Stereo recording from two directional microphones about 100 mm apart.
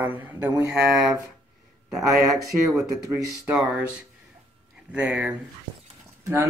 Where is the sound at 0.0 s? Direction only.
20° right (ahead or behind).